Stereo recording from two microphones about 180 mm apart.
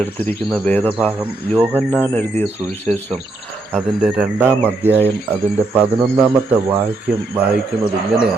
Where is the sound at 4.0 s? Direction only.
5° right (ahead or behind).